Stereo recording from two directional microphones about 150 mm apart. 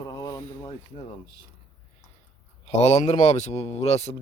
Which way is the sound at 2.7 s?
45° left (ahead or behind).